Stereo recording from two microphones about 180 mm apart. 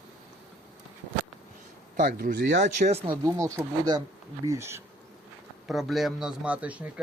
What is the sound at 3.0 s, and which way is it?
A man's voice, 20° right (ahead or behind).